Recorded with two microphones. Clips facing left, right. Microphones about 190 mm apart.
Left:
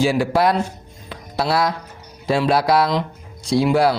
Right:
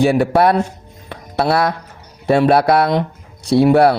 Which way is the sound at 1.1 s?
60° right (ahead or behind).